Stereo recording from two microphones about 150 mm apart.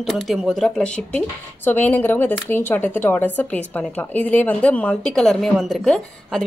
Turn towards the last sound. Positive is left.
turn(degrees=0)  # may be behind; listen again after turning